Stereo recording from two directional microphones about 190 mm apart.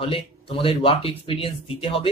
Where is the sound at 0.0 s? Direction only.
30° left (ahead or behind).